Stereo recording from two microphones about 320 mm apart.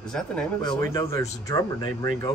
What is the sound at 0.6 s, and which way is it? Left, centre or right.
Speech, centre.